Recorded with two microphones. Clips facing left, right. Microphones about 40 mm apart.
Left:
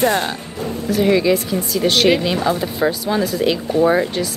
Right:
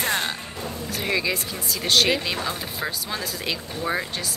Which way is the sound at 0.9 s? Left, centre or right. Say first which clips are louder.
Left 11 dB; centre.